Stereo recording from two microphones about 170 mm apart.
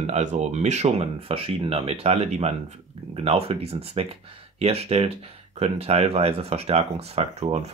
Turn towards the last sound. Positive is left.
turn(degrees=-40)  # may be behind; listen again after turning